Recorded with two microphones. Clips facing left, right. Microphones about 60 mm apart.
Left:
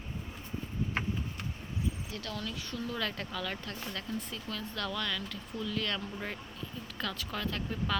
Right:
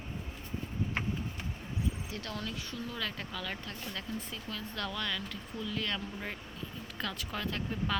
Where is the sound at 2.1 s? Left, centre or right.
Right.